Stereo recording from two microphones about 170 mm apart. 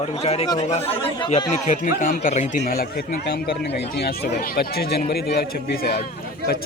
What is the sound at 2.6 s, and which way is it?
Speech, 60° left (ahead or behind).